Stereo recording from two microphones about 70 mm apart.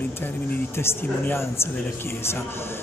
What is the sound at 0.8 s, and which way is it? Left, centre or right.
Speech, left.